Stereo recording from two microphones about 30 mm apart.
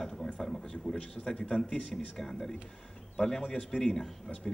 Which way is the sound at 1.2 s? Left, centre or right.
Left.